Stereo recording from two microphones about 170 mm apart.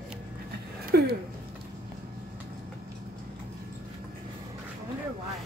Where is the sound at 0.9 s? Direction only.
70° right (ahead or behind).